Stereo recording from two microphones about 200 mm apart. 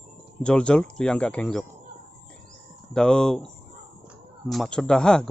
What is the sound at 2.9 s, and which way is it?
Speech, 5° left (ahead or behind).